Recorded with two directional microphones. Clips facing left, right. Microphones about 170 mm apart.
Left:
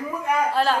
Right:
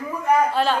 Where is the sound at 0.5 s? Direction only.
Centre (ahead or behind).